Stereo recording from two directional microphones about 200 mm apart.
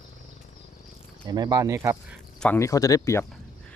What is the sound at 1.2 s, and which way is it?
Speech, 20° right (ahead or behind).